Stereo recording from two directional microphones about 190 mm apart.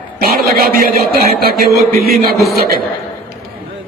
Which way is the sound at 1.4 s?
55° right (ahead or behind).